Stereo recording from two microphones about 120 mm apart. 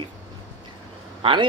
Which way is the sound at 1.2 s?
45° right (ahead or behind).